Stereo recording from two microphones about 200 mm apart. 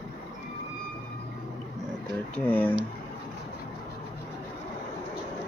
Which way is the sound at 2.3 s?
10° left (ahead or behind).